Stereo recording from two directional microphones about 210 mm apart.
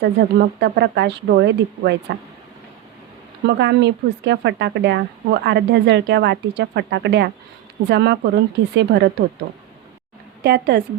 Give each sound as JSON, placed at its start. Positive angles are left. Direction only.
{"t": 0.0, "sound": "speech", "side_deg": -50}
{"t": 3.4, "sound": "speech", "side_deg": -55}
{"t": 10.4, "sound": "speech", "side_deg": -50}